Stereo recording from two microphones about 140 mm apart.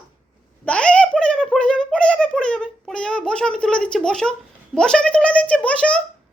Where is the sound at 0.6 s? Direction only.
10° left (ahead or behind).